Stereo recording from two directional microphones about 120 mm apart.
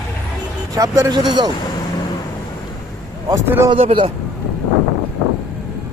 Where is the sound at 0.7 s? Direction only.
30° right (ahead or behind).